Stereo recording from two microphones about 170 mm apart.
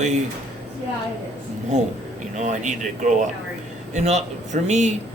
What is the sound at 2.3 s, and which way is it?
Speech, 45° right (ahead or behind).